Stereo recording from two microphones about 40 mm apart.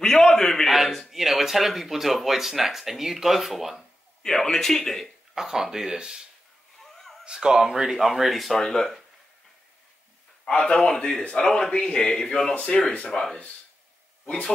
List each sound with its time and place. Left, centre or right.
0.0 s a sound: centre
0.7 s a sound: centre
2.2 s speech: centre
4.2 s a man's voice: centre
5.3 s speech: centre
6.8 s a sound: centre
7.2 s speech: centre
7.9 s speech: centre
10.5 s a man's voice: centre
12.9 s speech: left